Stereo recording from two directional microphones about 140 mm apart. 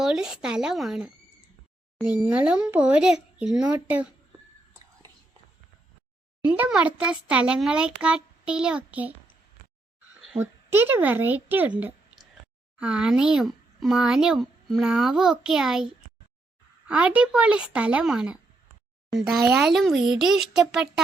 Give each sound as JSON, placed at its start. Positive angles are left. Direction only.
{"t": 0.0, "sound": "a child's voice", "side_deg": -5}
{"t": 6.4, "sound": "a child's voice", "side_deg": -10}
{"t": 10.2, "sound": "a sound", "side_deg": -5}
{"t": 10.4, "sound": "a child's voice", "side_deg": -15}
{"t": 16.9, "sound": "a child's voice", "side_deg": -10}